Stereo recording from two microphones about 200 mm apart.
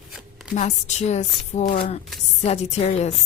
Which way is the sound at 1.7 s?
50° left (ahead or behind).